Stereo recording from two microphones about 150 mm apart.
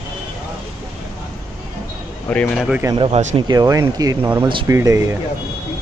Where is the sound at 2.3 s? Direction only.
5° left (ahead or behind).